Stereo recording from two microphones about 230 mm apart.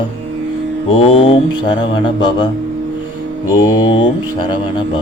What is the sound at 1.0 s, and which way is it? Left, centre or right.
Mantra, left.